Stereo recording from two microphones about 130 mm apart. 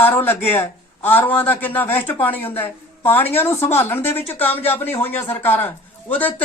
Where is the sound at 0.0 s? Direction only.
15° left (ahead or behind).